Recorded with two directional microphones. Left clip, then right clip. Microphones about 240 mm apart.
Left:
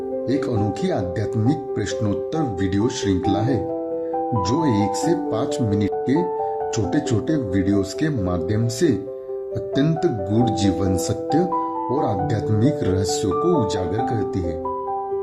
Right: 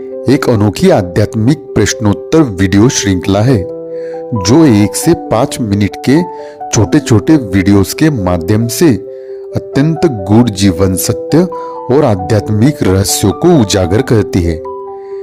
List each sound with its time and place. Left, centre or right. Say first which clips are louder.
0.3 s speech: right 14 dB; right
10.0 s speech: right 10 dB; right